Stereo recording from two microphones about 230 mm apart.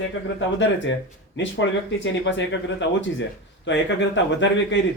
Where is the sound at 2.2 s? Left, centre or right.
Left.